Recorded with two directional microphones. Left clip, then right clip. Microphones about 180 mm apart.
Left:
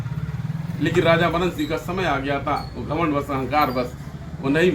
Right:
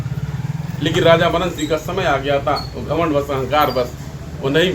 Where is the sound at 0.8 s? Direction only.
15° right (ahead or behind).